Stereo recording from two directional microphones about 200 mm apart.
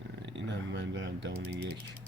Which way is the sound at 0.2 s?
65° right (ahead or behind).